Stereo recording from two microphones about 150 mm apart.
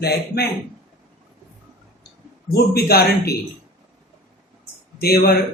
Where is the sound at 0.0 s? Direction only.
90° left.